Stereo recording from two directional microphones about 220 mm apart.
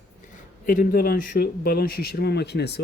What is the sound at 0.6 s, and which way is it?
Speech, 40° left (ahead or behind).